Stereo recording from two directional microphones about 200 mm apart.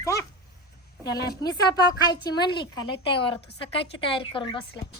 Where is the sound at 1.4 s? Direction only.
20° left (ahead or behind).